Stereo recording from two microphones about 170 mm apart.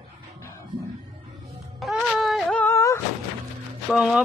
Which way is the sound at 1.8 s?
Centre (ahead or behind).